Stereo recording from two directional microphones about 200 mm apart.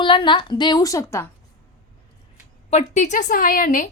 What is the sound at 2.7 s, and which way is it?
A woman's voice, 35° left (ahead or behind).